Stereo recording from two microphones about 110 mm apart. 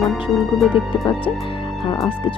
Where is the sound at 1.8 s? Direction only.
55° left (ahead or behind).